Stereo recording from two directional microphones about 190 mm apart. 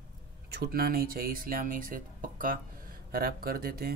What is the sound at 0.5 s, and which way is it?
Speech, 55° right (ahead or behind).